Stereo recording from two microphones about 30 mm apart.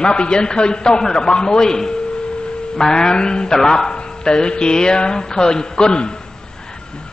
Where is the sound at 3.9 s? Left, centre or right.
Left.